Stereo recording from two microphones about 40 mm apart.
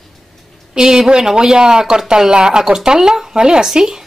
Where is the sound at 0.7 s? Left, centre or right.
Centre.